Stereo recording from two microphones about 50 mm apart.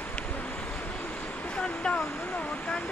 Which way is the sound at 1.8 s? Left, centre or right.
Left.